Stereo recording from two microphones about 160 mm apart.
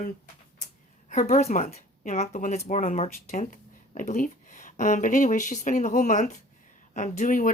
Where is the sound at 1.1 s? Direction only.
50° left (ahead or behind).